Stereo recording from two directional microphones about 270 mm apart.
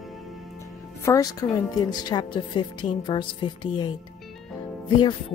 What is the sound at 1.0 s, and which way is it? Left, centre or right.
A woman's voice, centre.